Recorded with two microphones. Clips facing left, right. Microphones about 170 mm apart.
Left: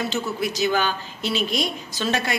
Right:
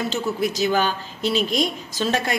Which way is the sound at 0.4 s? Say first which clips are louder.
Right 2 dB; 40° right (ahead or behind).